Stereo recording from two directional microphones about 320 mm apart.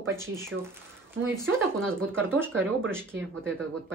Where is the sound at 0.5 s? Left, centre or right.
Right.